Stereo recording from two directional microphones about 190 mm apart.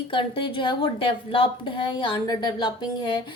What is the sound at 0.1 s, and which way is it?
Speech, 25° left (ahead or behind).